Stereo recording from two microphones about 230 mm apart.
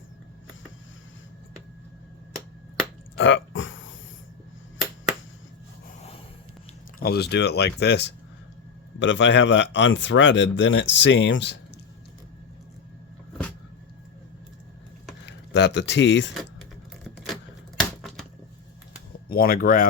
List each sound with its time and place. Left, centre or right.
3.2 s hiccup: left
7.0 s speech: left
15.3 s speech: left
17.7 s a sound: centre
19.3 s speech: left